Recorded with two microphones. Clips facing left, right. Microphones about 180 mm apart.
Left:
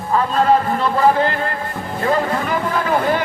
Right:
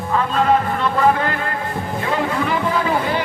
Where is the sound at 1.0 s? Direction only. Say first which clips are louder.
Left 2 dB; 30° left (ahead or behind).